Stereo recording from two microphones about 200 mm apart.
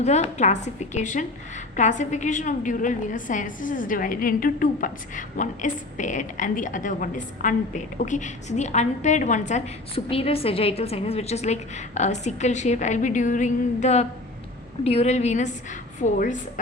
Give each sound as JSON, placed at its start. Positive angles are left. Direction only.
{"t": 0.0, "sound": "a woman's voice", "side_deg": 35}